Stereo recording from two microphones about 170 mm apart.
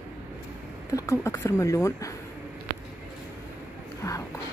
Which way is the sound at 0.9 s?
20° left (ahead or behind).